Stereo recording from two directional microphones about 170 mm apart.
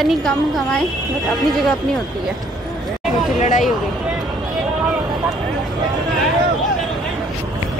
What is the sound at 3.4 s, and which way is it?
Speech, 50° left (ahead or behind).